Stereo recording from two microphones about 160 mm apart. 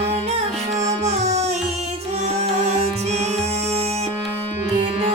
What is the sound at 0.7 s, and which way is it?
Music, 45° right (ahead or behind).